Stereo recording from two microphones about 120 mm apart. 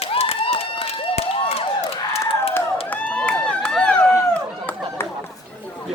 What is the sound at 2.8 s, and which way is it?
Run, 10° left (ahead or behind).